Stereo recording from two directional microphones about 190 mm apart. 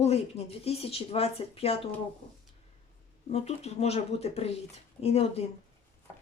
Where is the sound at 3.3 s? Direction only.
35° left (ahead or behind).